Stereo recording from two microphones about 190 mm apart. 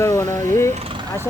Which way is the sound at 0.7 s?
30° right (ahead or behind).